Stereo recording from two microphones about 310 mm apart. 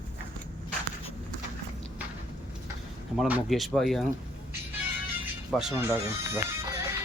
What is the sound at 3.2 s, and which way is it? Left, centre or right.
Speech, centre.